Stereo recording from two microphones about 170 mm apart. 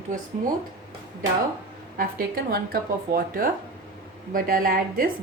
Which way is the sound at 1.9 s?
60° right (ahead or behind).